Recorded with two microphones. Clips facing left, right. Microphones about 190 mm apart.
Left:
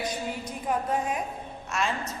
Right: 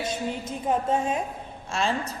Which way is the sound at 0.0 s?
25° right (ahead or behind).